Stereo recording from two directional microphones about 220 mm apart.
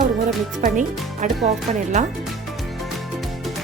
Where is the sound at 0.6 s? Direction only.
35° right (ahead or behind).